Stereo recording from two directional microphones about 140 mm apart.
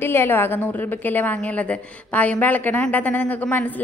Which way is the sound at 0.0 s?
15° left (ahead or behind).